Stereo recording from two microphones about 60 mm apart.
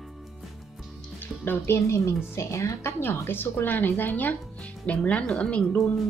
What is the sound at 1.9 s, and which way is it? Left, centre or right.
Speech, left.